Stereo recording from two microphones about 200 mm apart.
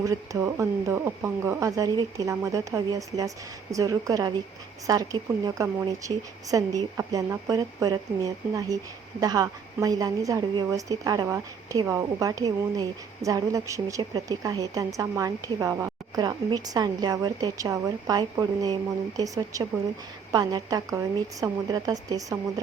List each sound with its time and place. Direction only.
0.0 s a woman's voice: 15° right (ahead or behind)